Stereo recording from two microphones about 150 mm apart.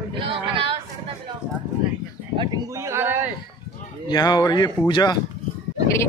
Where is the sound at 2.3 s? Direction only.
25° right (ahead or behind).